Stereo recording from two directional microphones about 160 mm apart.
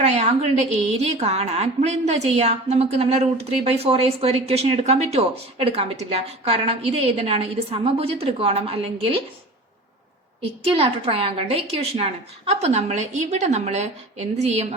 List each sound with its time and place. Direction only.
0.0 s a woman's voice: 40° right (ahead or behind)
10.6 s a woman's voice: 40° right (ahead or behind)